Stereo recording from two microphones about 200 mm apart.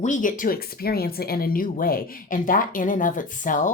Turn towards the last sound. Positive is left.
turn(degrees=40)  # may be behind; listen again after turning